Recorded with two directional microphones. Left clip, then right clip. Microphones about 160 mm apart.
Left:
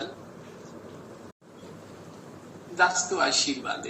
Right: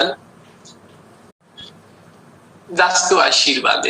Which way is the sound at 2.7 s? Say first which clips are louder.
Right 10 dB; 75° right (ahead or behind).